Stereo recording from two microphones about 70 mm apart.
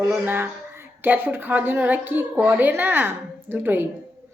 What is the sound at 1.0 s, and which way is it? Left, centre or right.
A woman's voice, right.